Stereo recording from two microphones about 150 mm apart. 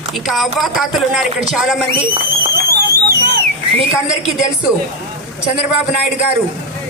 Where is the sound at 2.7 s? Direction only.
90° right.